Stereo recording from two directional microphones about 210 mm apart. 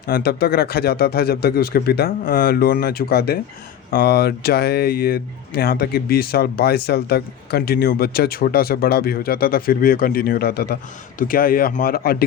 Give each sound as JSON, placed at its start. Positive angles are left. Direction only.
{"t": 0.1, "sound": "speech", "side_deg": 50}